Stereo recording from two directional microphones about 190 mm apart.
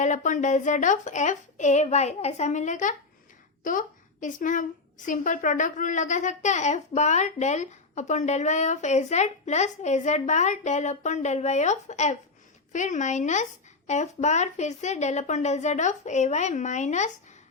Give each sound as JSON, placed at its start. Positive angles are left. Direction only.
{"t": 0.0, "sound": "a woman's voice", "side_deg": 40}